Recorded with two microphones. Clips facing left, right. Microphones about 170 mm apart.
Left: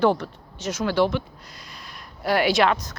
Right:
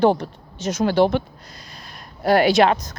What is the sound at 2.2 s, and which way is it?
Speech, 45° right (ahead or behind).